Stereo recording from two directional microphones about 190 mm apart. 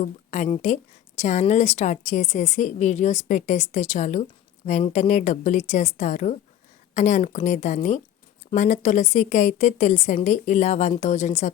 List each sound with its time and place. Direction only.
0.0 s speech: 35° left (ahead or behind)